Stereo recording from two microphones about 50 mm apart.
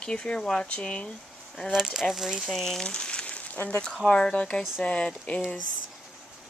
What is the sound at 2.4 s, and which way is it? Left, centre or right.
Speech, centre.